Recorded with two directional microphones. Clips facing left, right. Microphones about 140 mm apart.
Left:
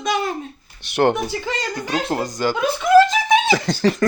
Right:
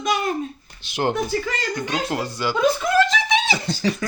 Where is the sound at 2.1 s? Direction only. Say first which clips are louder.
Left 3 dB; 40° left (ahead or behind).